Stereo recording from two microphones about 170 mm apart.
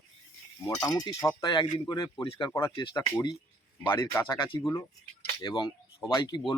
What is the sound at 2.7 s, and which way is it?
Speech, 25° left (ahead or behind).